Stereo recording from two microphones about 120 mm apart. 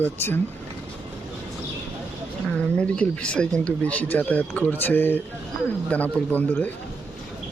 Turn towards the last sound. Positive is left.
turn(degrees=15)  # may be behind; listen again after turning